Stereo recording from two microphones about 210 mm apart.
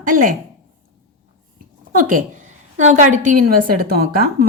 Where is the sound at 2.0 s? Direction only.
40° right (ahead or behind).